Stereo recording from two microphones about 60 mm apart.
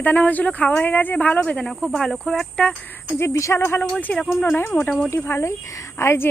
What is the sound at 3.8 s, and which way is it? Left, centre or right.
Speech, left.